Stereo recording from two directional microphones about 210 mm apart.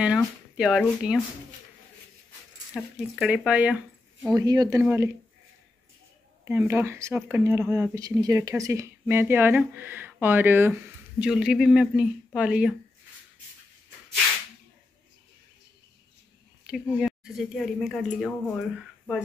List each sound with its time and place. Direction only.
0.0 s speech: 5° right (ahead or behind)
2.7 s speech: 5° right (ahead or behind)
4.3 s speech: 20° right (ahead or behind)
6.4 s speech: 10° right (ahead or behind)
16.6 s speech: centre (ahead or behind)